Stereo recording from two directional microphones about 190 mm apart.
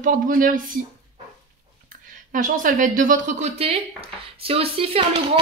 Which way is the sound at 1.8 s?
45° right (ahead or behind).